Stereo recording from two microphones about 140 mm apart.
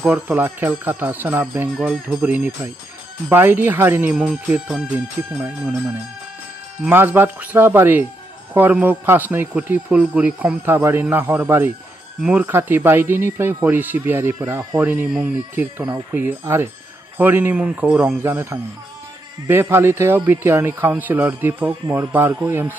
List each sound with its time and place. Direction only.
0.0 s speech: 10° right (ahead or behind)
6.8 s speech: 15° right (ahead or behind)